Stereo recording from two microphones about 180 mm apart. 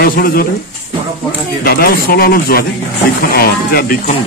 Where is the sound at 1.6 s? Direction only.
55° left (ahead or behind).